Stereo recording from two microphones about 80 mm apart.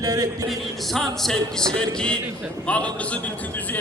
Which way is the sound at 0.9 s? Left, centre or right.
Centre.